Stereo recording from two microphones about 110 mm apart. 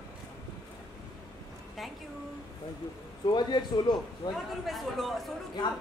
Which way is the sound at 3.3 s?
40° left (ahead or behind).